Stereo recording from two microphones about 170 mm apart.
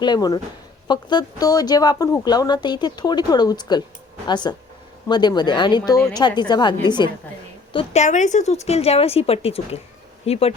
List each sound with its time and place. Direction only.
0.0 s a woman's voice: 25° left (ahead or behind)
8.0 s a woman's voice: 45° left (ahead or behind)